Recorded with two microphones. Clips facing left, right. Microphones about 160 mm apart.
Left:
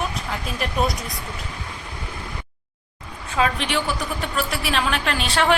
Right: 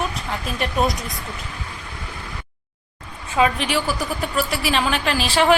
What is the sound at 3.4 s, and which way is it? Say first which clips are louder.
A woman's voice: right 3 dB; 5° right (ahead or behind).